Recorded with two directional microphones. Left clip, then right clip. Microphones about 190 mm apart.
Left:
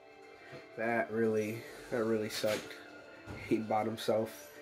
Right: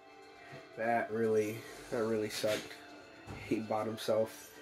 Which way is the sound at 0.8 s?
20° left (ahead or behind).